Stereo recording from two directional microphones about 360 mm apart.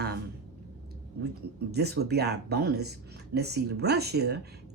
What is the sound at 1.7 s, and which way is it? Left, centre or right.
A woman's voice, right.